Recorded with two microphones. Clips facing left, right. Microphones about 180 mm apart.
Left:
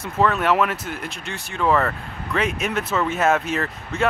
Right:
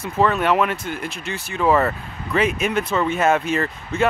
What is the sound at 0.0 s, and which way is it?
Speech, centre (ahead or behind).